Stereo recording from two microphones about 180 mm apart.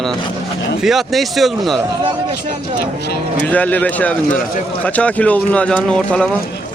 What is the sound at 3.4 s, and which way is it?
Speech, 10° left (ahead or behind).